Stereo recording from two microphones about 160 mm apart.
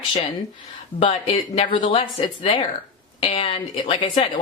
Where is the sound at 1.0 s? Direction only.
35° left (ahead or behind).